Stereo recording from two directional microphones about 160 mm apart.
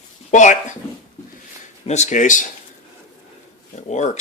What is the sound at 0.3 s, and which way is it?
Speech, 50° left (ahead or behind).